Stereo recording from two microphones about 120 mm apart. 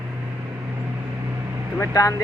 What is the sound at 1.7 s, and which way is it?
Speech, 25° left (ahead or behind).